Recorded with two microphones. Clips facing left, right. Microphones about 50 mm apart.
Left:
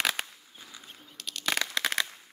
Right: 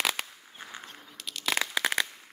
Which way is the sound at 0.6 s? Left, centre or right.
Right.